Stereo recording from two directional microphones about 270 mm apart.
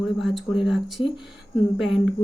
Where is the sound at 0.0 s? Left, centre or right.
Centre.